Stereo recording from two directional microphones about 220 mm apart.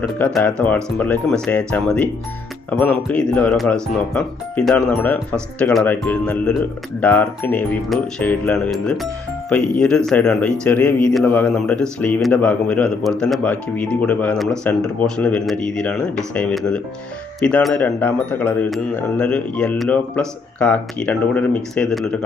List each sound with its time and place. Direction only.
0.3 s speech: 5° left (ahead or behind)